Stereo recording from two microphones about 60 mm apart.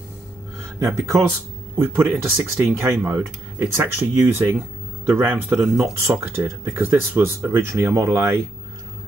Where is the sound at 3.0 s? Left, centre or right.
Right.